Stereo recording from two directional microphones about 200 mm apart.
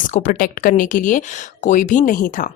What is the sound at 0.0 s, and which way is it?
Speech, 40° left (ahead or behind).